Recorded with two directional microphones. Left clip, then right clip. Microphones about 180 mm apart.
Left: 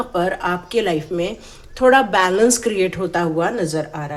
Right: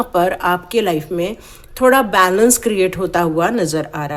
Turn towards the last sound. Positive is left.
turn(degrees=-45)  # may be behind; listen again after turning